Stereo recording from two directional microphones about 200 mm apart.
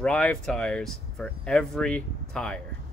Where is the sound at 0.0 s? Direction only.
5° left (ahead or behind).